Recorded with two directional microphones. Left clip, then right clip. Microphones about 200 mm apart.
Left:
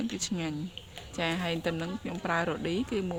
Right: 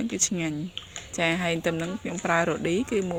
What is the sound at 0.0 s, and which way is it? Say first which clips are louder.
Speech: right 6 dB; 15° right (ahead or behind).